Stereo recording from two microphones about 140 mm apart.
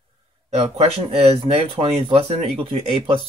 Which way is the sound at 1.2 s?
40° right (ahead or behind).